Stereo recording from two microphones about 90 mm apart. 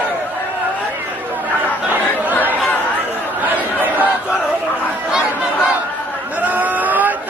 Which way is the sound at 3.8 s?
20° right (ahead or behind).